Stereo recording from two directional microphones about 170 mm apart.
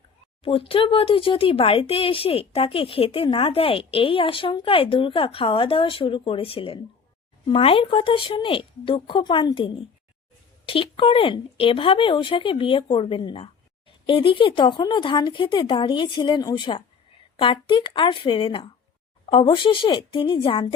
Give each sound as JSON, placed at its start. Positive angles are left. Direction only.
{"t": 0.4, "sound": "a woman's voice", "side_deg": 35}